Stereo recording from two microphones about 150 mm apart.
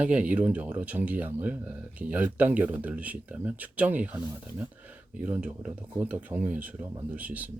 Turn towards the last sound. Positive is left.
turn(degrees=-10)  # may be behind; listen again after turning